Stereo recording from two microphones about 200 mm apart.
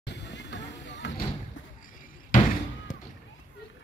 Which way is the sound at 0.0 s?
60° left (ahead or behind).